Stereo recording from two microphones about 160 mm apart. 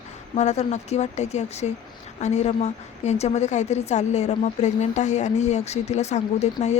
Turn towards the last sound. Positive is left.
turn(degrees=45)  # may be behind; listen again after turning